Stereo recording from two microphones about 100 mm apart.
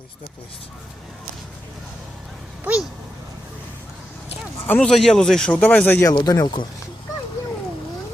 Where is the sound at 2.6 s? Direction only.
10° right (ahead or behind).